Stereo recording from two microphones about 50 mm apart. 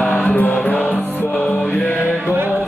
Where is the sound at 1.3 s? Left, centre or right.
Centre.